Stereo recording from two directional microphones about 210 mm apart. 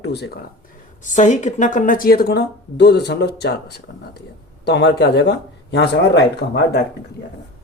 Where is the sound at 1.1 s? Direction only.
35° left (ahead or behind); by 6.8 s 55° left (ahead or behind).